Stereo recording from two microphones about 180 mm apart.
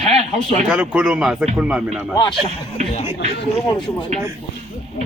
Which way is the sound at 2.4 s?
35° right (ahead or behind).